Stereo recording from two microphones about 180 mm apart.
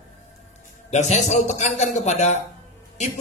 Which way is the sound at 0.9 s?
40° left (ahead or behind).